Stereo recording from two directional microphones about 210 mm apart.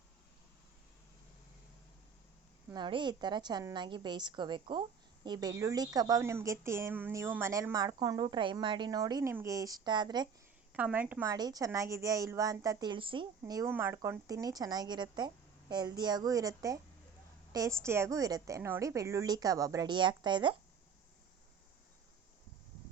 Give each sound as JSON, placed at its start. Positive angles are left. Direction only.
{"t": 2.6, "sound": "a woman's voice", "side_deg": -20}
{"t": 10.8, "sound": "a woman's voice", "side_deg": -5}